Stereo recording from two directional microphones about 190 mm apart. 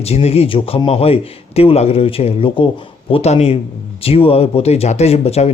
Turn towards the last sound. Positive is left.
turn(degrees=35)  # may be behind; listen again after turning